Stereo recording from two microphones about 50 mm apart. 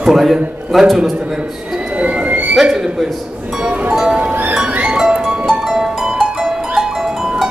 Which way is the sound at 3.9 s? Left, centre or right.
Centre.